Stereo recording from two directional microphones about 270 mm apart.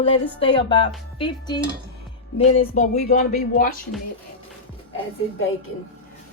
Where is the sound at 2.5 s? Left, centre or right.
Left.